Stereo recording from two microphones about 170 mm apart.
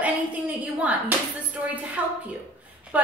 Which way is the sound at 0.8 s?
10° right (ahead or behind).